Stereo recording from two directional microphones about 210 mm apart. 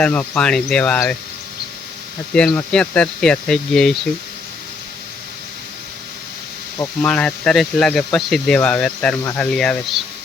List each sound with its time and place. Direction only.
0.0 s speech: 5° left (ahead or behind)
2.3 s speech: 5° left (ahead or behind)
6.7 s speech: 5° left (ahead or behind)